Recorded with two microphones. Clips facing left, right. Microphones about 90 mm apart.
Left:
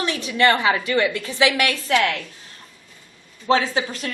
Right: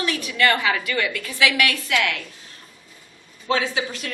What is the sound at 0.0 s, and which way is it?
A woman's voice, 30° left (ahead or behind).